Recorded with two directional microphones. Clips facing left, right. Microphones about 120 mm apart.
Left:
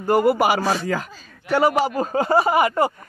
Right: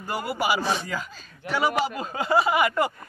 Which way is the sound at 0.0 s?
50° left (ahead or behind).